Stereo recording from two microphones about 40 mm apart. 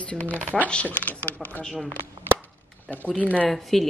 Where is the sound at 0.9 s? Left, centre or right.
Left.